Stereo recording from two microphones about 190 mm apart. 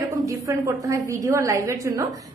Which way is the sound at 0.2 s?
15° right (ahead or behind).